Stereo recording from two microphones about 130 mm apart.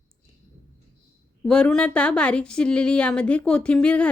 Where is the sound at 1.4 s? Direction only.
10° left (ahead or behind).